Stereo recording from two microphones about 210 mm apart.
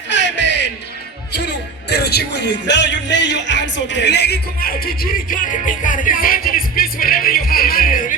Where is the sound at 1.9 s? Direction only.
50° left (ahead or behind).